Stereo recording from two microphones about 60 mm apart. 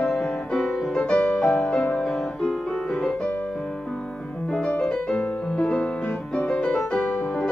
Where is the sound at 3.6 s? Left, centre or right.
Centre.